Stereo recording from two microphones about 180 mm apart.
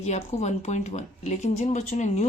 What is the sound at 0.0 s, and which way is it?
Speech, 40° left (ahead or behind).